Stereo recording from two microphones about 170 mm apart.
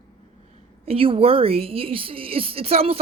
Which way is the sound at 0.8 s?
35° right (ahead or behind).